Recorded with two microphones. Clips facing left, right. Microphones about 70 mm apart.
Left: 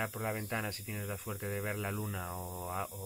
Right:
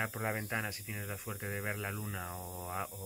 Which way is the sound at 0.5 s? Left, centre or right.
Centre.